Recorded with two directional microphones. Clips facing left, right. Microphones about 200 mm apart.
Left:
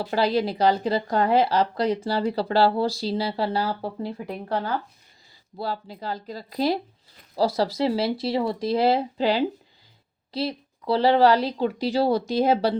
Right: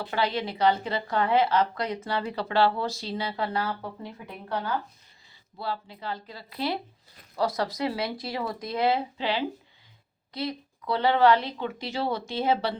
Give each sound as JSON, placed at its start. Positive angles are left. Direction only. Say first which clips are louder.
{"t": 0.0, "sound": "speech", "louder": "left 6 dB", "side_deg": 35}